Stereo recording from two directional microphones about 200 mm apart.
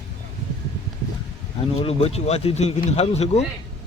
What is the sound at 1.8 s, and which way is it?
Speech, 30° left (ahead or behind).